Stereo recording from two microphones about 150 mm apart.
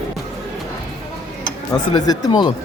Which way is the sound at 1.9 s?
25° left (ahead or behind).